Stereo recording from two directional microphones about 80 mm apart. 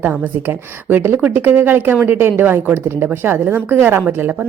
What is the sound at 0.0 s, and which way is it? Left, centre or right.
A woman's voice, right.